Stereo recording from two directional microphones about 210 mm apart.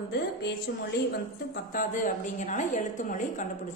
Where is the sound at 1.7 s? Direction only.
40° left (ahead or behind).